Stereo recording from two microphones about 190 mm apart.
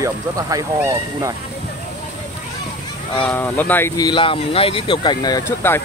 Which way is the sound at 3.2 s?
10° left (ahead or behind).